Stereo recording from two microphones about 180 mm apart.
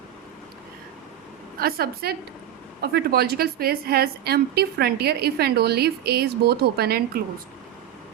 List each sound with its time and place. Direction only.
1.5 s a woman's voice: 55° right (ahead or behind)